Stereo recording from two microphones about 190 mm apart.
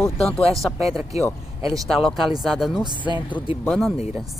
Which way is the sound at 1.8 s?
Centre (ahead or behind).